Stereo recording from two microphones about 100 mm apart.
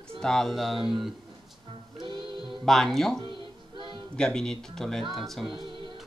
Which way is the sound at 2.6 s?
5° left (ahead or behind).